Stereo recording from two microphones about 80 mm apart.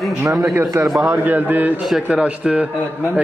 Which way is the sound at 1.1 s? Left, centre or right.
Right.